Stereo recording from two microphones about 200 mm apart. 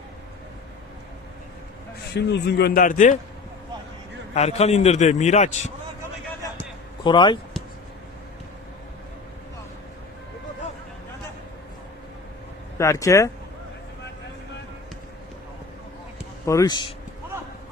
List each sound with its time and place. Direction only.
2.1 s a man's voice: 55° left (ahead or behind); by 3.2 s 40° left (ahead or behind)
4.4 s a man's voice: 30° left (ahead or behind)
7.0 s speech: 25° left (ahead or behind)
12.7 s speech: 15° left (ahead or behind)
16.5 s speech: 20° left (ahead or behind)